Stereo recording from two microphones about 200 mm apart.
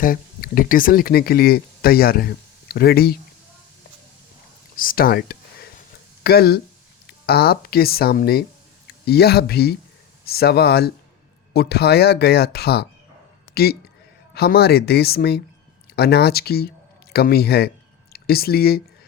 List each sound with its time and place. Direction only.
0.0 s speech: 45° left (ahead or behind)
4.8 s a man's voice: 45° left (ahead or behind)